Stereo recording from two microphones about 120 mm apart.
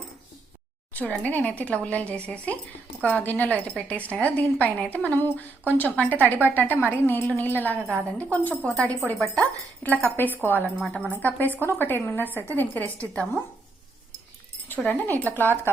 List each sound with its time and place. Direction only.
0.9 s a woman's voice: 15° left (ahead or behind)
14.8 s a woman's voice: 15° left (ahead or behind)